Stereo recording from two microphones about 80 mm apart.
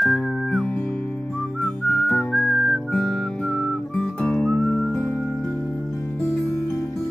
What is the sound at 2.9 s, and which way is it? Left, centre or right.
Music, centre.